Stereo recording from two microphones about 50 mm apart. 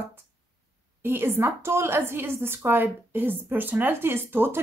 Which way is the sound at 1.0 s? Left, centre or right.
Right.